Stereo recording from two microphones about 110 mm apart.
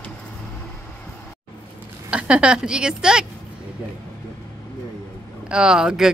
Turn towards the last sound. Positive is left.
turn(degrees=-5)  # may be behind; listen again after turning